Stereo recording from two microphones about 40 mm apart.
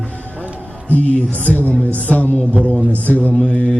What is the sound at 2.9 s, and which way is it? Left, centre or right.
Music, left.